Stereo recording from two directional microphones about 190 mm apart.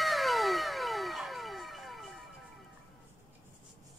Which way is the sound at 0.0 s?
Centre (ahead or behind).